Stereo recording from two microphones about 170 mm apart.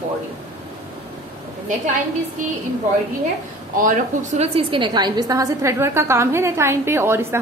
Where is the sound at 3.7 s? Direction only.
50° right (ahead or behind).